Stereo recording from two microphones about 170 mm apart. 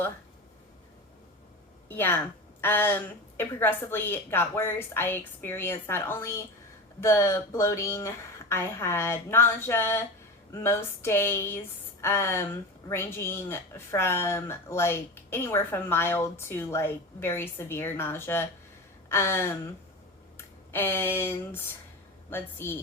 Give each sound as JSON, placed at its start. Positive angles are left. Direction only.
{"t": 1.9, "sound": "speech", "side_deg": 10}
{"t": 19.0, "sound": "a sound", "side_deg": 15}
{"t": 20.7, "sound": "speech", "side_deg": 15}